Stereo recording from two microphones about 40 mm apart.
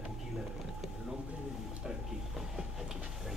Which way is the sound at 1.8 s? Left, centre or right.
Centre.